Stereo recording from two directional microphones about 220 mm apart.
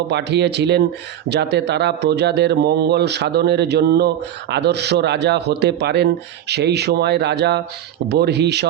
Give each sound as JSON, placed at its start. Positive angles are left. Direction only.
{"t": 0.1, "sound": "a man's voice", "side_deg": -50}